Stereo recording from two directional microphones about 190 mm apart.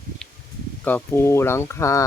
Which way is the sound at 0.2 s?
5° left (ahead or behind).